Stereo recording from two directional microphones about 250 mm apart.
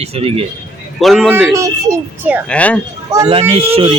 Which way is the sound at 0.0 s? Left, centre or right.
Right.